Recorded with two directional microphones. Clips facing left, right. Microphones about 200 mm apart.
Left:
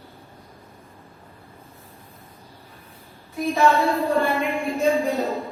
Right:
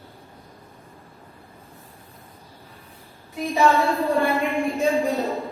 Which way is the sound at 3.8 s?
Centre (ahead or behind).